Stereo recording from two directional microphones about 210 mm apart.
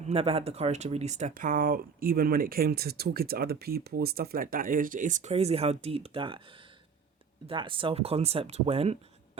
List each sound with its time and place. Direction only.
0.1 s speech: 25° right (ahead or behind)
7.4 s speech: 25° right (ahead or behind)